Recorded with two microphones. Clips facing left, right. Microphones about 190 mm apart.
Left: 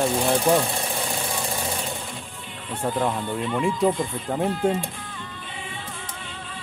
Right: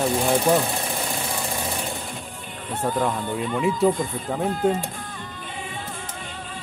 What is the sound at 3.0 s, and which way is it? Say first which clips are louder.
Speech: left 1 dB; centre (ahead or behind).